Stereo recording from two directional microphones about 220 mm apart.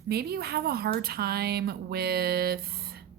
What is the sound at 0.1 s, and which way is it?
Speech, 45° right (ahead or behind).